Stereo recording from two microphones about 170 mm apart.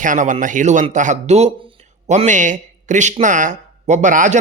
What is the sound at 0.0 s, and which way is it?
Speech, 50° right (ahead or behind).